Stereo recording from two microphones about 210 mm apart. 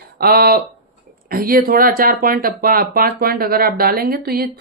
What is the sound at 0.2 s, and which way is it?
Speech, 45° right (ahead or behind).